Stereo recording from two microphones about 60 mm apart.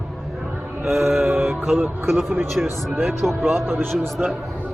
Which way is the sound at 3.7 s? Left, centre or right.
Right.